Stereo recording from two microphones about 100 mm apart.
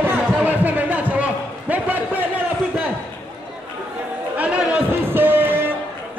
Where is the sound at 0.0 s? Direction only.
20° right (ahead or behind).